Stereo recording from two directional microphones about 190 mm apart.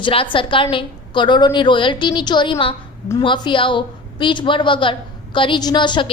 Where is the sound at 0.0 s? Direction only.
25° left (ahead or behind).